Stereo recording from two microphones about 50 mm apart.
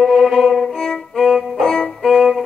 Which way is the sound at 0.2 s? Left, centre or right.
Centre.